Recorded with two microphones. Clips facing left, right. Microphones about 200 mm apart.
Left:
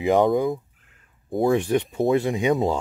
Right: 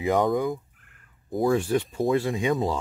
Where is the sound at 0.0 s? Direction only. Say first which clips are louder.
Left 4 dB; 25° left (ahead or behind).